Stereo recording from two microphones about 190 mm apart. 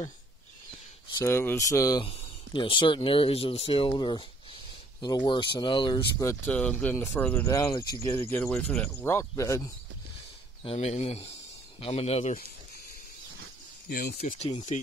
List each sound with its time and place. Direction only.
1.1 s speech: 15° left (ahead or behind)
2.0 s speech: 30° left (ahead or behind)
6.4 s speech: 10° left (ahead or behind)
10.6 s speech: 30° left (ahead or behind)
13.8 s speech: 50° left (ahead or behind)
14.7 s speech: 40° left (ahead or behind)